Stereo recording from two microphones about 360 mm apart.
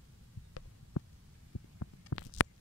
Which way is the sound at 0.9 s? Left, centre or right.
Left.